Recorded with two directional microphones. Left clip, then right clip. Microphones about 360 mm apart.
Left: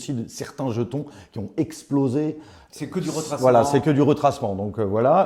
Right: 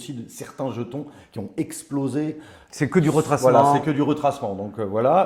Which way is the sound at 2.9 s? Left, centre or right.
Right.